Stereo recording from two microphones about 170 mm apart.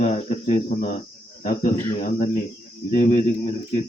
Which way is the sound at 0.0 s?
40° left (ahead or behind).